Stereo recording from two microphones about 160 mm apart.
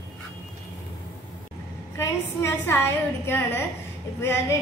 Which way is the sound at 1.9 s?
15° left (ahead or behind).